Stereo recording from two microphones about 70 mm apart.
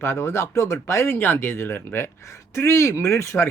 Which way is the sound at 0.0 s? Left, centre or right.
Left.